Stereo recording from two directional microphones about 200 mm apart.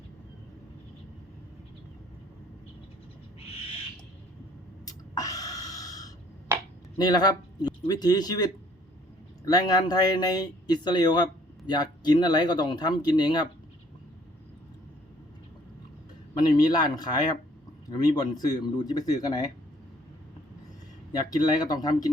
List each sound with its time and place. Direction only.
4.9 s a sound: 15° left (ahead or behind)
7.0 s speech: 20° left (ahead or behind)
16.4 s speech: 20° left (ahead or behind)
21.2 s speech: 20° left (ahead or behind)